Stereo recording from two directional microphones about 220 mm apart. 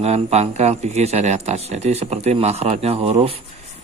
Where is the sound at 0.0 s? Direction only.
30° right (ahead or behind).